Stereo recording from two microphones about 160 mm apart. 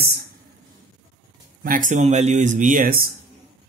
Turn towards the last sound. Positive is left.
turn(degrees=-65)  # may be behind; listen again after turning